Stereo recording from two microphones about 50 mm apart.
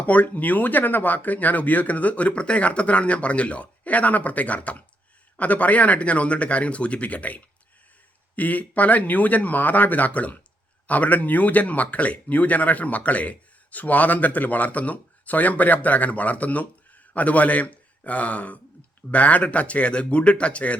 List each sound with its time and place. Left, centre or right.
0.0 s speech: left